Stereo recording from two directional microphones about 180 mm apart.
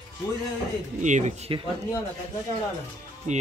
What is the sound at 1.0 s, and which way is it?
Speech, 40° right (ahead or behind).